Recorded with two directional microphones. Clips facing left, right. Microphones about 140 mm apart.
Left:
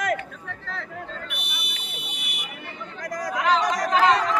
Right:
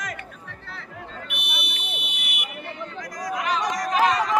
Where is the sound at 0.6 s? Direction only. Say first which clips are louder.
Left 7 dB; 90° left.